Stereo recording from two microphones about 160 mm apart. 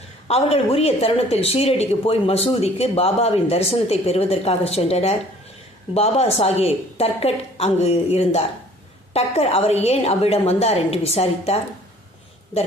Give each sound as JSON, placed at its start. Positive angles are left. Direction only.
{"t": 0.3, "sound": "a woman's voice", "side_deg": 40}